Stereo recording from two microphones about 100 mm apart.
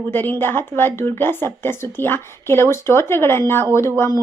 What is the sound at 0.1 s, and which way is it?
Speech, 20° left (ahead or behind).